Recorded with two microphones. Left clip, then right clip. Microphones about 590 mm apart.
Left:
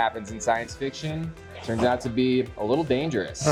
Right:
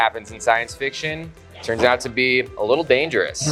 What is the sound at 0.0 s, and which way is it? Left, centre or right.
Speech, right.